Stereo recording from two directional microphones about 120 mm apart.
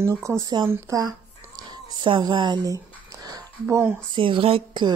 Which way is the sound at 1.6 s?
40° right (ahead or behind).